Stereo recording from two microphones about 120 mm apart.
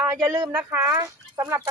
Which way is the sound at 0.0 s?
15° right (ahead or behind).